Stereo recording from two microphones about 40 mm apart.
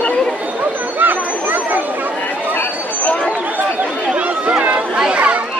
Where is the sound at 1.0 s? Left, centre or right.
Right.